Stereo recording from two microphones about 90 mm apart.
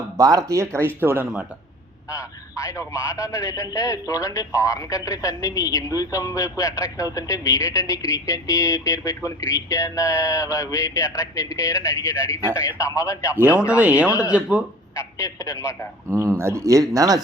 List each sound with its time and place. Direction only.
0.2 s speech: 40° right (ahead or behind); by 1.3 s 25° right (ahead or behind)
2.0 s speech: 35° left (ahead or behind)
13.7 s speech: 15° right (ahead or behind)
14.9 s speech: 30° left (ahead or behind)
16.0 s speech: 30° right (ahead or behind)